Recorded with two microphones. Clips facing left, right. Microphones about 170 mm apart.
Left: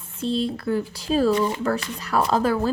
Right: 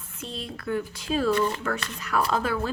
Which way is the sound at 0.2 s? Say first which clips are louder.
Left 12 dB; 30° left (ahead or behind).